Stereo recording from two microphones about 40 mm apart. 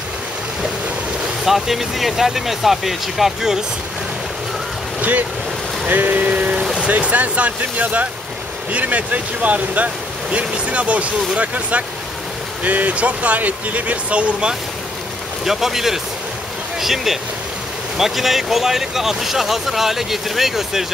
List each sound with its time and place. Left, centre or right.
1.4 s speech: centre
5.9 s speech: right
6.6 s vehicle: centre
6.9 s speech: right
15.4 s speech: centre